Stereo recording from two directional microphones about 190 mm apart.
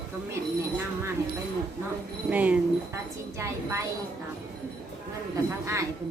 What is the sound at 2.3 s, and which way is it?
A woman's voice, 5° right (ahead or behind).